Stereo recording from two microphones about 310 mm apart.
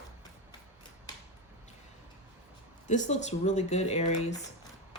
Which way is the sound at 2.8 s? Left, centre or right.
Left.